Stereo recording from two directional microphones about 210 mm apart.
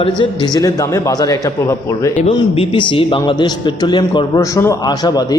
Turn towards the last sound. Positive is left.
turn(degrees=20)  # may be behind; listen again after turning